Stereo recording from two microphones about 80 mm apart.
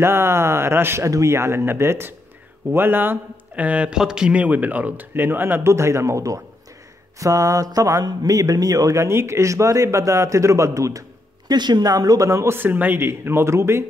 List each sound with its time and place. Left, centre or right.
0.0 s a man's voice: right
11.5 s speech: right